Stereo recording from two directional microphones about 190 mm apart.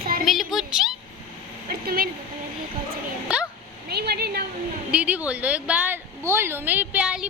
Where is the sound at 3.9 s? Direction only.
55° right (ahead or behind).